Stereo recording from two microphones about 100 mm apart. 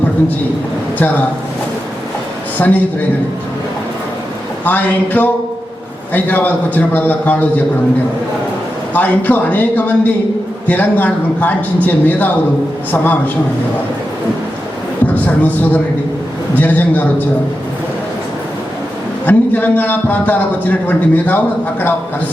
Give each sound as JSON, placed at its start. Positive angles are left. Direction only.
{"t": 0.9, "sound": "a man's voice", "side_deg": 15}
{"t": 2.6, "sound": "a man's voice", "side_deg": 15}
{"t": 4.6, "sound": "a man's voice", "side_deg": 20}
{"t": 8.9, "sound": "a man's voice", "side_deg": 15}
{"t": 15.0, "sound": "a sound", "side_deg": 15}
{"t": 16.6, "sound": "a man's voice", "side_deg": 15}
{"t": 19.2, "sound": "a man's voice", "side_deg": 20}